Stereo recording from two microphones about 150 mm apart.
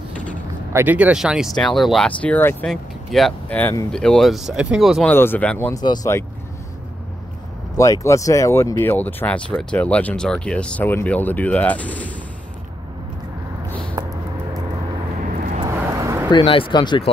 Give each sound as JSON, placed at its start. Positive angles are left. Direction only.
{"t": 0.7, "sound": "speech", "side_deg": -10}
{"t": 5.1, "sound": "speech", "side_deg": 15}
{"t": 5.8, "sound": "speech", "side_deg": 20}
{"t": 7.7, "sound": "speech", "side_deg": 20}
{"t": 14.0, "sound": "a sound", "side_deg": -25}
{"t": 15.6, "sound": "vehicle", "side_deg": -20}
{"t": 16.3, "sound": "speech", "side_deg": 35}